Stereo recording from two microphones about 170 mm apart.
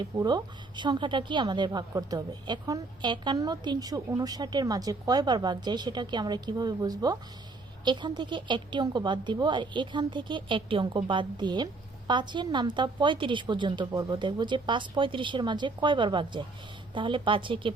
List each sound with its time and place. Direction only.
0.0 s a woman's voice: 25° right (ahead or behind)